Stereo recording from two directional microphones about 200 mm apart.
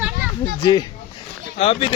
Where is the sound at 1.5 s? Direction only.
30° left (ahead or behind).